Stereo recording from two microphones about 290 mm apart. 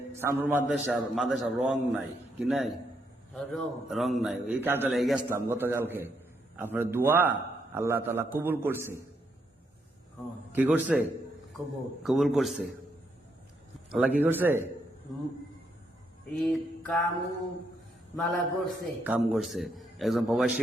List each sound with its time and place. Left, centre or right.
0.1 s a man's voice: centre
10.5 s a man's voice: centre
12.0 s a man's voice: centre
13.9 s a man's voice: centre
16.3 s a man's voice: centre
18.2 s a man's voice: centre